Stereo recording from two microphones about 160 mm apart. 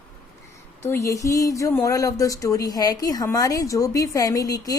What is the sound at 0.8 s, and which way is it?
Speech, 15° left (ahead or behind).